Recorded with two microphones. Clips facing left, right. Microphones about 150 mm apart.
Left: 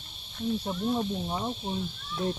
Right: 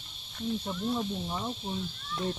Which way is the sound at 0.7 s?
30° left (ahead or behind).